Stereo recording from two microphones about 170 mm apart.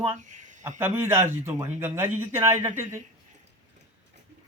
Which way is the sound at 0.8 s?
15° right (ahead or behind).